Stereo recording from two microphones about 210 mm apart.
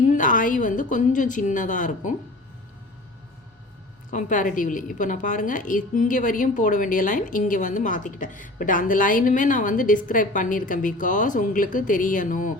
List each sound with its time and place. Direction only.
0.1 s a woman's voice: 40° left (ahead or behind)
4.1 s a woman's voice: 35° left (ahead or behind)